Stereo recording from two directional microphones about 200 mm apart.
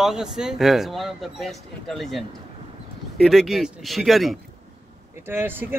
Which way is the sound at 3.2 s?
Centre (ahead or behind).